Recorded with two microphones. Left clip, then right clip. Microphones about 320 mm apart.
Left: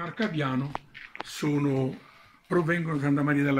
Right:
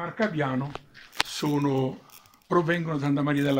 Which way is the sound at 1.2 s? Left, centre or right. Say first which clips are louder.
Right 3 dB; right.